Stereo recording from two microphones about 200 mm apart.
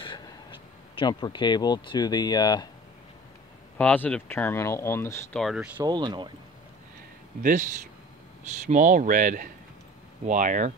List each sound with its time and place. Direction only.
0.0 s speech: 25° left (ahead or behind)
3.7 s speech: 10° left (ahead or behind)
5.4 s speech: 5° right (ahead or behind)
5.9 s speech: 20° right (ahead or behind)
8.6 s speech: 40° right (ahead or behind)